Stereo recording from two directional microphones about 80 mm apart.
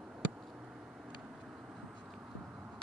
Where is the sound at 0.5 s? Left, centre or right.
Centre.